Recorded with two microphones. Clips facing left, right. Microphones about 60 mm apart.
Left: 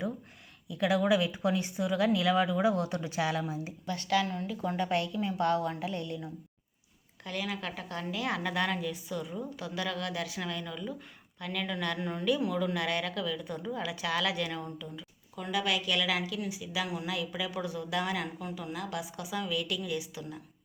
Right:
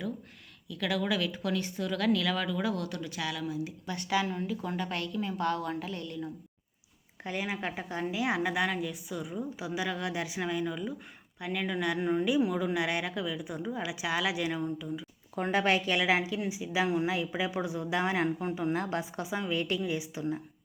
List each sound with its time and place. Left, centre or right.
0.7 s speech: left
3.8 s speech: centre
4.6 s a woman's voice: centre
7.3 s speech: right
15.4 s a woman's voice: right